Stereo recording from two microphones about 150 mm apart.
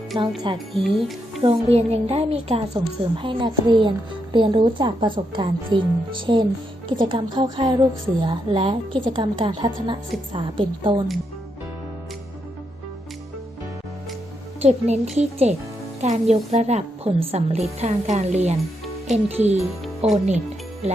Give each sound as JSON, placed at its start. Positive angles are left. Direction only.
{"t": 0.1, "sound": "a woman's voice", "side_deg": -30}
{"t": 0.7, "sound": "speech", "side_deg": 0}
{"t": 1.4, "sound": "a woman's voice", "side_deg": -40}
{"t": 14.6, "sound": "a woman's voice", "side_deg": -50}